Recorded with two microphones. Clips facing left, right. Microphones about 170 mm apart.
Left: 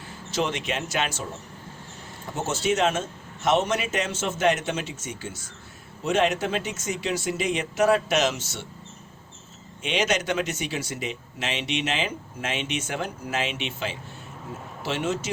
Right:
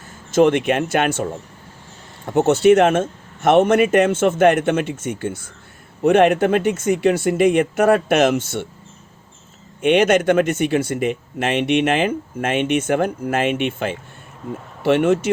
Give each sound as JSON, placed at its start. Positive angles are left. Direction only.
{"t": 0.1, "sound": "speech", "side_deg": -50}
{"t": 2.3, "sound": "speech", "side_deg": -60}
{"t": 9.8, "sound": "speech", "side_deg": -55}